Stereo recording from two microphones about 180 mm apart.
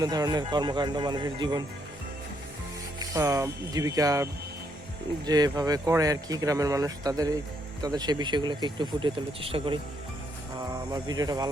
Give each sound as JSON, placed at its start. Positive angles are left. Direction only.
{"t": 0.0, "sound": "speech", "side_deg": -20}
{"t": 3.0, "sound": "speech", "side_deg": -20}